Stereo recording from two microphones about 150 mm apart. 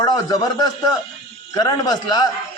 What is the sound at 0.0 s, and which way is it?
A man's voice, 25° left (ahead or behind).